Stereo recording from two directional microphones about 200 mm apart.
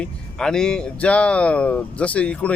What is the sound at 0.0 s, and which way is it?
Speech, 5° left (ahead or behind).